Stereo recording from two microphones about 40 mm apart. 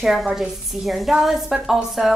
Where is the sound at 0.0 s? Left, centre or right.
Centre.